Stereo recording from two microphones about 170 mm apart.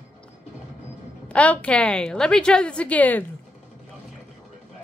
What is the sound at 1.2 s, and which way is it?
A woman's voice, 10° left (ahead or behind).